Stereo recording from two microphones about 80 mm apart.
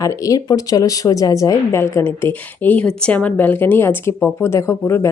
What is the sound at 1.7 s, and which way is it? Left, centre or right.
Speech, left.